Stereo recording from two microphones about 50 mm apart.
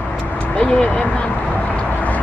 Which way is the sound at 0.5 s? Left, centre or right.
Centre.